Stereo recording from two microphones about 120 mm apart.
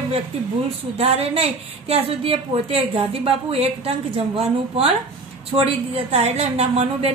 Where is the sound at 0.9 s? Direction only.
55° right (ahead or behind).